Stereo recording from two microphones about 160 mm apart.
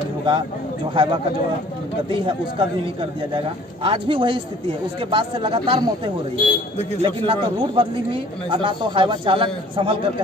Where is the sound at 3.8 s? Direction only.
30° right (ahead or behind).